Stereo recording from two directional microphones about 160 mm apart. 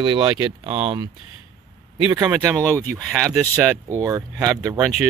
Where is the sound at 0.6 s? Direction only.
40° right (ahead or behind).